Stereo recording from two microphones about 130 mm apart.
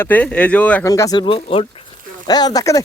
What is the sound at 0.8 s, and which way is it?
Speech, 25° left (ahead or behind).